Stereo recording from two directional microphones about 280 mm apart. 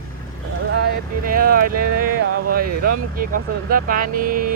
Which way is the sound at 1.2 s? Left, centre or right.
Right.